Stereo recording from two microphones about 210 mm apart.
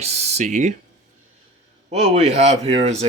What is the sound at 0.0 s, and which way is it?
Speech, 30° right (ahead or behind).